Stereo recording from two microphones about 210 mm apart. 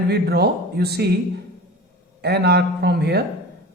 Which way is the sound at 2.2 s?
50° right (ahead or behind).